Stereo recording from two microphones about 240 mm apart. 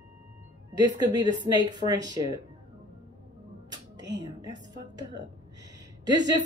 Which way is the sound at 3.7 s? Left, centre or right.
Centre.